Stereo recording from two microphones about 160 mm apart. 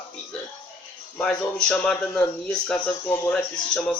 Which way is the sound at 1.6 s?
5° left (ahead or behind).